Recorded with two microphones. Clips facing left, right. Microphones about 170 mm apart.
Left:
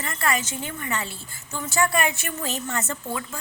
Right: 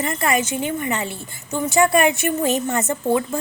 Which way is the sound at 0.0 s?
20° right (ahead or behind).